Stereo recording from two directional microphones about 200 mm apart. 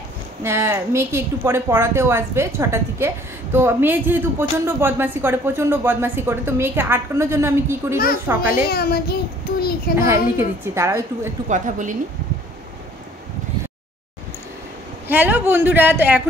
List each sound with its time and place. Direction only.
0.4 s a woman's voice: 15° right (ahead or behind)
8.6 s a child's voice: 50° left (ahead or behind)
9.9 s a woman's voice: 10° right (ahead or behind)
11.4 s a woman's voice: 40° right (ahead or behind)
15.0 s a woman's voice: 10° right (ahead or behind)